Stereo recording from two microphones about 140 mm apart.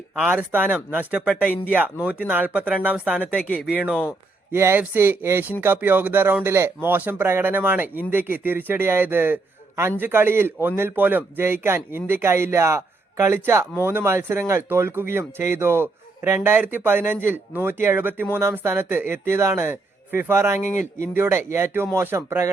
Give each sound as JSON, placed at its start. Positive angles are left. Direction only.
{"t": 0.3, "sound": "speech", "side_deg": -10}
{"t": 3.3, "sound": "speech", "side_deg": 0}
{"t": 4.5, "sound": "speech", "side_deg": -15}